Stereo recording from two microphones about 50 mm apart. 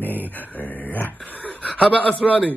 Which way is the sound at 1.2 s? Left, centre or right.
Left.